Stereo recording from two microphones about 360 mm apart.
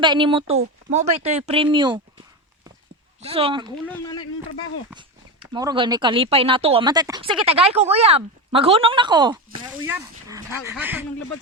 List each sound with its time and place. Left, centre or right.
0.0 s speech: centre
3.2 s speech: centre
3.8 s speech: centre
4.9 s speech: centre